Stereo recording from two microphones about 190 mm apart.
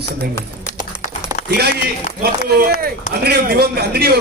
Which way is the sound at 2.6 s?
55° right (ahead or behind).